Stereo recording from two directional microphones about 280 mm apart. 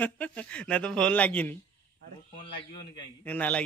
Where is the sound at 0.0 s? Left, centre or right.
Centre.